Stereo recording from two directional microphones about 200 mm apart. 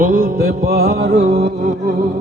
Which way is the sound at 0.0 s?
40° right (ahead or behind).